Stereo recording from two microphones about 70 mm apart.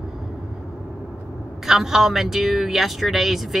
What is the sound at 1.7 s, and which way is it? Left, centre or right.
Speech, centre.